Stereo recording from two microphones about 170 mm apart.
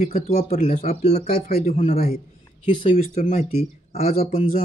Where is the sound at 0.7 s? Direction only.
40° left (ahead or behind).